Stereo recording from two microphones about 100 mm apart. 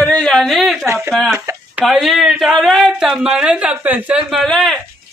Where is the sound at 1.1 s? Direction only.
5° left (ahead or behind); by 4.2 s 15° right (ahead or behind).